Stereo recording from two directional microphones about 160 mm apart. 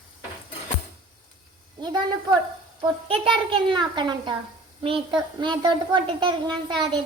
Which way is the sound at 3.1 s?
30° right (ahead or behind).